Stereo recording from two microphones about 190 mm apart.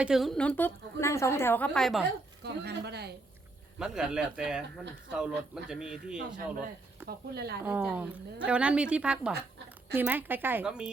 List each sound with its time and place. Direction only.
0.0 s a woman's voice: centre (ahead or behind)
2.4 s speech: 60° right (ahead or behind)
3.8 s a woman's voice: 5° right (ahead or behind)
7.1 s speech: 55° right (ahead or behind)
7.6 s a woman's voice: 10° right (ahead or behind)